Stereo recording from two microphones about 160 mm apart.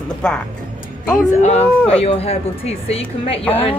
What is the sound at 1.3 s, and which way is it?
A woman's voice, 45° left (ahead or behind).